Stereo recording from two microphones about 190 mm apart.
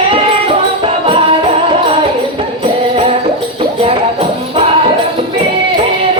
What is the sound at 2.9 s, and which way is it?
Music, 30° right (ahead or behind).